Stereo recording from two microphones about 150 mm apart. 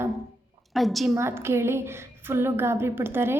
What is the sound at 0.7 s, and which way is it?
Speech, centre (ahead or behind).